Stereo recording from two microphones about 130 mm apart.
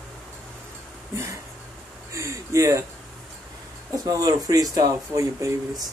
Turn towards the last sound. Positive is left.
turn(degrees=-25)  # may be behind; listen again after turning